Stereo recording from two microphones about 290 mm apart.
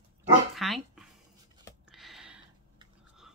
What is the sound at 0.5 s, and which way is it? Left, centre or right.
Dog, centre.